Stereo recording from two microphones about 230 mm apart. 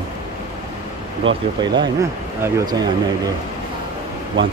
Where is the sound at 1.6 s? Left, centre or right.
Centre.